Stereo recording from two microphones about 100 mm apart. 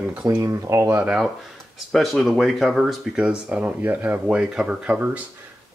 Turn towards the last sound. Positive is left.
turn(degrees=-10)  # may be behind; listen again after turning